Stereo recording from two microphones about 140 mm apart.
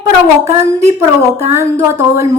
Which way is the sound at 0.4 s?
20° right (ahead or behind).